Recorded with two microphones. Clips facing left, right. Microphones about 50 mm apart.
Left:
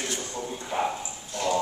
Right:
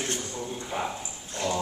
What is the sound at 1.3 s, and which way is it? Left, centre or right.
Dog, right.